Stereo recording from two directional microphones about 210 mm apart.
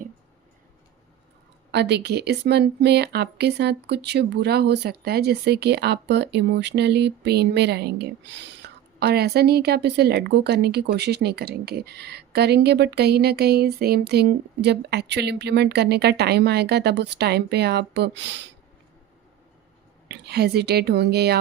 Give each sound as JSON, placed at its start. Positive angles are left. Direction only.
{"t": 1.7, "sound": "speech", "side_deg": -55}
{"t": 20.1, "sound": "speech", "side_deg": -50}